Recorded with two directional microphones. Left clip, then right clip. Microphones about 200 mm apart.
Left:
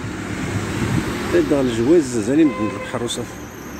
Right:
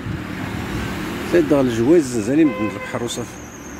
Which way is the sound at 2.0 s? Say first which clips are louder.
Even; 10° right (ahead or behind).